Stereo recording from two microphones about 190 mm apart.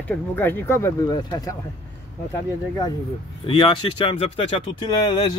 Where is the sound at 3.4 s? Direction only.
25° left (ahead or behind).